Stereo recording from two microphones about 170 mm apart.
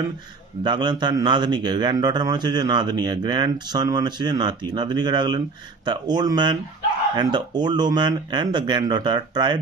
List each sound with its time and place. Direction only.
0.7 s a man's voice: 25° right (ahead or behind)